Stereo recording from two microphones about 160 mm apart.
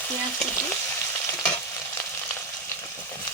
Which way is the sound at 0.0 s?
15° left (ahead or behind).